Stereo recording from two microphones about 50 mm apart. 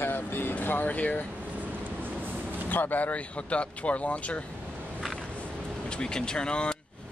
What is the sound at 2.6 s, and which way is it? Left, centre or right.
Speech, left.